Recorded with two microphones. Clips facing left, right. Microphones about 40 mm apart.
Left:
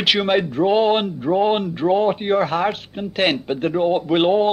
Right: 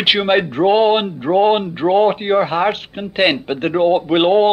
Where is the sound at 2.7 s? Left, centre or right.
Right.